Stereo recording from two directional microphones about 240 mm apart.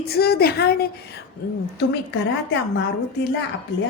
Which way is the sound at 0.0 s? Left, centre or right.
Left.